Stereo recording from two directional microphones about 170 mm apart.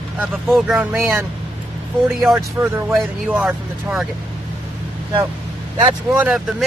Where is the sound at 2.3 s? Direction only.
15° right (ahead or behind).